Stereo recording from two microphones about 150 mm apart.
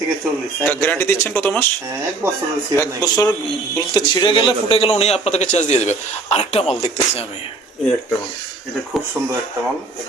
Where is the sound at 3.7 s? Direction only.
25° left (ahead or behind); by 7.2 s 45° left (ahead or behind).